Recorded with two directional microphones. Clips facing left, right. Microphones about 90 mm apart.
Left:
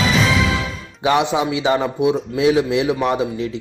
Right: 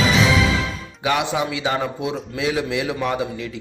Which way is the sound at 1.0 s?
20° left (ahead or behind).